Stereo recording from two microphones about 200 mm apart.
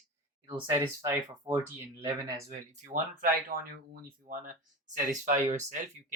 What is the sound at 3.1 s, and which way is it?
Speech, 45° right (ahead or behind).